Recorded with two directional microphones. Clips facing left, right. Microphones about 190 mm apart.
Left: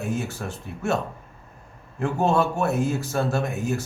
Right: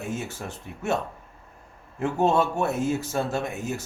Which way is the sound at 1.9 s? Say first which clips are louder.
Even; 20° right (ahead or behind).